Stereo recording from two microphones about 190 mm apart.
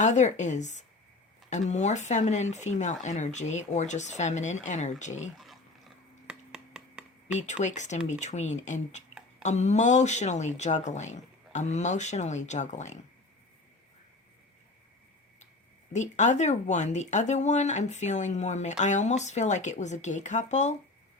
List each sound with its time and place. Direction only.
0.0 s speech: 40° left (ahead or behind)
6.2 s a sound: 5° right (ahead or behind)
7.3 s speech: 35° left (ahead or behind)
15.9 s speech: 40° left (ahead or behind)